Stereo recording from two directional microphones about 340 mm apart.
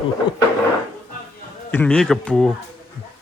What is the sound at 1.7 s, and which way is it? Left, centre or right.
Speech, centre.